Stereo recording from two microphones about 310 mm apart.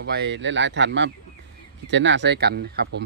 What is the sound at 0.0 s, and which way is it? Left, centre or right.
Speech, right.